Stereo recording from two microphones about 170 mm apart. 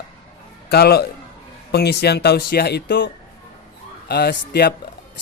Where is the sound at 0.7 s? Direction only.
70° left (ahead or behind).